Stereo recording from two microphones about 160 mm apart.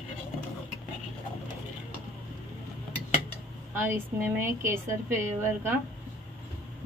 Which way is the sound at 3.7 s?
15° right (ahead or behind).